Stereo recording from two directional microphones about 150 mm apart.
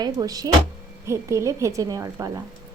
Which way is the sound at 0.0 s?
25° right (ahead or behind).